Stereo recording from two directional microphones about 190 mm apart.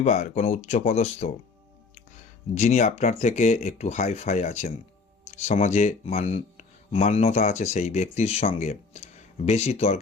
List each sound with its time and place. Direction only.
0.0 s speech: 40° left (ahead or behind)
2.6 s speech: 40° left (ahead or behind)